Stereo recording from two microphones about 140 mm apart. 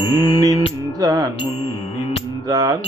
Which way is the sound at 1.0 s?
30° right (ahead or behind).